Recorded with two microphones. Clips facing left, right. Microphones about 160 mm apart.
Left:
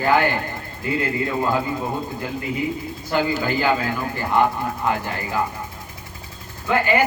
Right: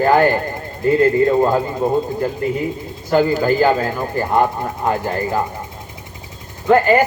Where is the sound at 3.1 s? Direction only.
40° right (ahead or behind).